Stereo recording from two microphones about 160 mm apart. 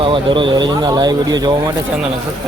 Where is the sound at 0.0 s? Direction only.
30° right (ahead or behind).